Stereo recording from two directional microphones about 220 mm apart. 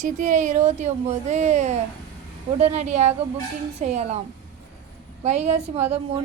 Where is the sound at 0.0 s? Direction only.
35° right (ahead or behind).